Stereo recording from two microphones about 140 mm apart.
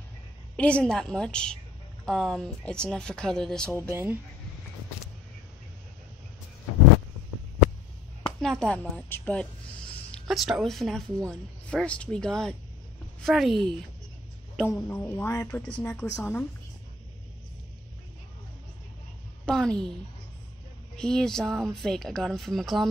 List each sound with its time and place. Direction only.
0.6 s speech: 10° left (ahead or behind)
3.9 s speech: 15° right (ahead or behind)
8.4 s speech: 5° left (ahead or behind)
14.8 s speech: 15° left (ahead or behind)
19.4 s a woman's voice: 5° left (ahead or behind)
20.9 s speech: 5° left (ahead or behind)